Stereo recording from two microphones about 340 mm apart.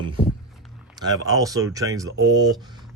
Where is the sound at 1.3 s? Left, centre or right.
Centre.